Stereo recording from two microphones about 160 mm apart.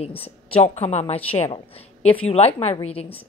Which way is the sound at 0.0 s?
35° left (ahead or behind).